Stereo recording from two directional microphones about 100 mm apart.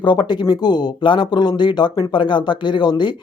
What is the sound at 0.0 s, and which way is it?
Speech, 50° left (ahead or behind).